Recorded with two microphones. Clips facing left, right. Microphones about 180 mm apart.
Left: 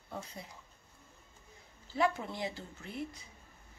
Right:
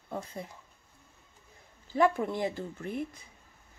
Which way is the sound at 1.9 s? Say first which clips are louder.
Right 6 dB; 50° right (ahead or behind).